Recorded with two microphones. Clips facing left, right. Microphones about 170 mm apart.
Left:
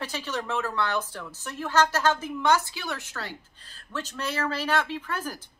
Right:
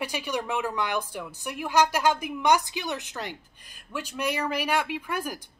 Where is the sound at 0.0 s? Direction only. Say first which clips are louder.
Right 2 dB; 15° right (ahead or behind).